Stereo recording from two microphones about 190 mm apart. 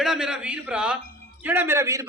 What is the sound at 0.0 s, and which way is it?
A man's voice, 5° right (ahead or behind).